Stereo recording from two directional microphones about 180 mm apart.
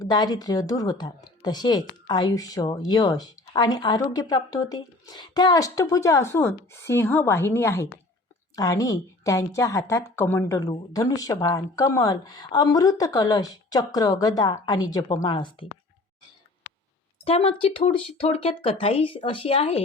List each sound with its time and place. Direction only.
0.0 s a woman's voice: 20° left (ahead or behind)
17.2 s speech: 30° left (ahead or behind)